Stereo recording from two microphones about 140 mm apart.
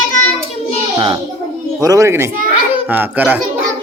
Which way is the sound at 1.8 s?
25° right (ahead or behind).